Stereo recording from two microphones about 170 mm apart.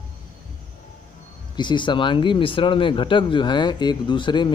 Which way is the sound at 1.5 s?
25° left (ahead or behind).